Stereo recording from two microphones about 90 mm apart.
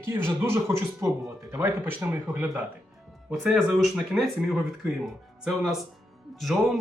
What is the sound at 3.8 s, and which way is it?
Speech, centre (ahead or behind).